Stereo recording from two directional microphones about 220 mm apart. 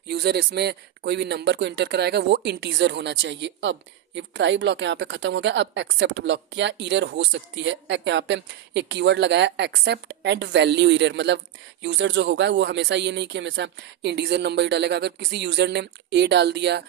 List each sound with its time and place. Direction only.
0.1 s speech: 45° right (ahead or behind)